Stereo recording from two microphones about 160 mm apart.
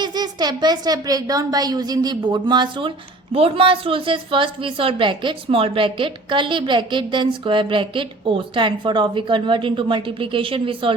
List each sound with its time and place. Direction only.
0.0 s a woman's voice: 25° right (ahead or behind)